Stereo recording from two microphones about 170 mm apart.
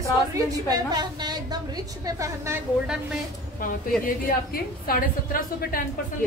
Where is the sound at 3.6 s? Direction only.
55° left (ahead or behind).